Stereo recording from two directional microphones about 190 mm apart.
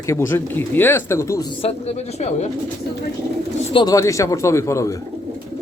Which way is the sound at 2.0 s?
35° left (ahead or behind).